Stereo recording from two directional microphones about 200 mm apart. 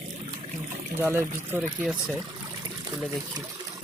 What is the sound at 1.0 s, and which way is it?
Speech, 10° right (ahead or behind).